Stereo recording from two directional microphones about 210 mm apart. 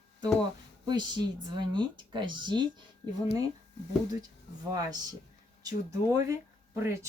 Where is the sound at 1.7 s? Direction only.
20° right (ahead or behind).